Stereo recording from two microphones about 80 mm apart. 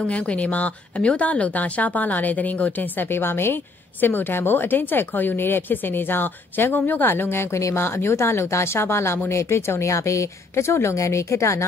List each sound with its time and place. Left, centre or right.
0.0 s speech: centre; by 11.6 s left